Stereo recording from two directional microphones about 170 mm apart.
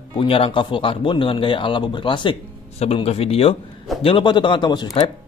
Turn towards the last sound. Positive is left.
turn(degrees=25)  # may be behind; listen again after turning